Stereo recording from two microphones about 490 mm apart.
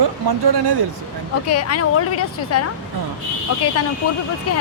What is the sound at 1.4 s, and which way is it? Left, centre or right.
A woman's voice, left.